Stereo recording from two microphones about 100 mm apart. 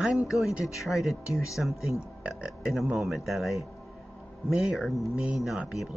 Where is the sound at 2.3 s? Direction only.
5° right (ahead or behind).